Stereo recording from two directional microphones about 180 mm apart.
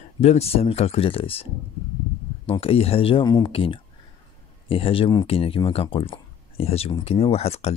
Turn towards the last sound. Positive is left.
turn(degrees=35)  # may be behind; listen again after turning